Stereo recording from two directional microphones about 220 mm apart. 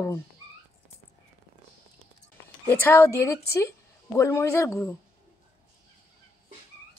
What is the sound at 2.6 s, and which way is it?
A woman's voice, 10° left (ahead or behind).